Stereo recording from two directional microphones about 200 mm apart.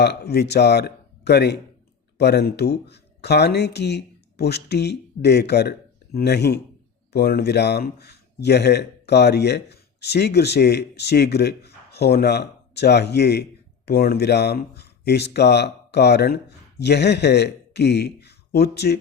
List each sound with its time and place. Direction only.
0.0 s speech: 55° left (ahead or behind)